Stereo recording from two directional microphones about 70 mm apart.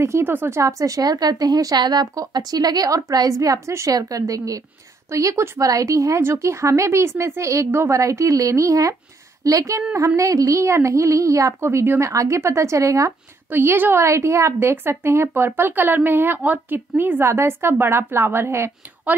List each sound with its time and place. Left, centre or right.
0.0 s speech: right
0.6 s speech: right
13.5 s speech: right
14.0 s speech: right